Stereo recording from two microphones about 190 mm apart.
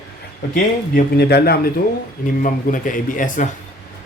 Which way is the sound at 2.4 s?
45° left (ahead or behind).